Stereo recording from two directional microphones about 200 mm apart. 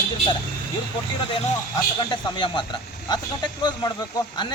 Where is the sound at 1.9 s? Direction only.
25° left (ahead or behind).